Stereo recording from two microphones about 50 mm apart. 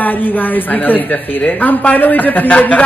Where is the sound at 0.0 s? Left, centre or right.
Left.